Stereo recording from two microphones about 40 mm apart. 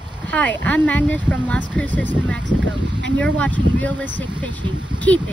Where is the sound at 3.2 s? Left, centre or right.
Left.